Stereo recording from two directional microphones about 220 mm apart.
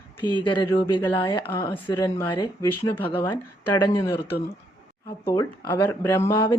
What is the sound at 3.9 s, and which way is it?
Speech, 15° left (ahead or behind).